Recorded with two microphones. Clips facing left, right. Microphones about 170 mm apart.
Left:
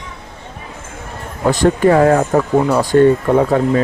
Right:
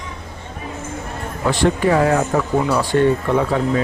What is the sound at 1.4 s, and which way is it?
Speech, 45° left (ahead or behind).